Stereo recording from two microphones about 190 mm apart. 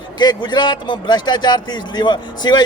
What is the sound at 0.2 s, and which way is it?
A man's voice, 20° left (ahead or behind).